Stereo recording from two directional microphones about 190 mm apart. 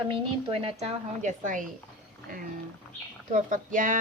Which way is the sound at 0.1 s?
30° right (ahead or behind).